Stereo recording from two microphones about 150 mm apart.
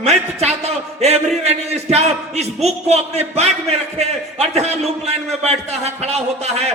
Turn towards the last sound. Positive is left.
turn(degrees=-45)  # may be behind; listen again after turning